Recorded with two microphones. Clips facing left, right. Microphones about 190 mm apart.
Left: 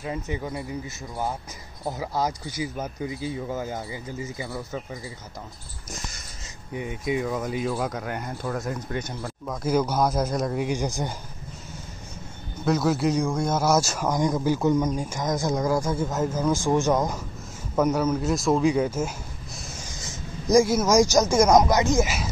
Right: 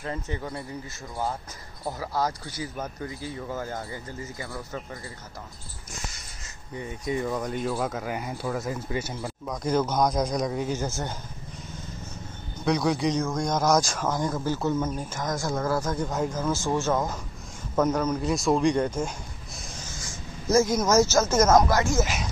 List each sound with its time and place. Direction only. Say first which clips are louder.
0.0 s speech: left 2 dB; 10° left (ahead or behind)
6.7 s speech: left 3 dB; 10° left (ahead or behind)
12.6 s speech: left 2 dB; centre (ahead or behind)
19.9 s speech: left 2 dB; 20° left (ahead or behind)